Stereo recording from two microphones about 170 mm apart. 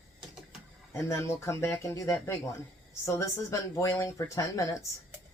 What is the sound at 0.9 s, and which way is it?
Speech, 15° left (ahead or behind).